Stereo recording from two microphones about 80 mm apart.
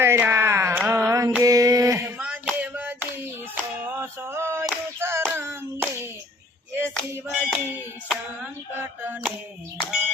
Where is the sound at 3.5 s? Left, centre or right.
Right.